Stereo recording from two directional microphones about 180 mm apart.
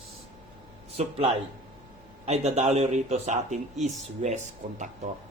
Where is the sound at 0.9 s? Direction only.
35° right (ahead or behind).